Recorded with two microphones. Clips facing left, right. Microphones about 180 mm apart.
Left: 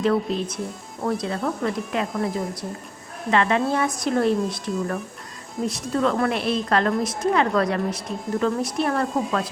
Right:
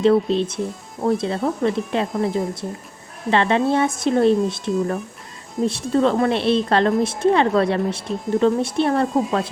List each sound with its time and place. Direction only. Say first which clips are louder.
0.0 s a woman's voice: right 5 dB; 25° right (ahead or behind)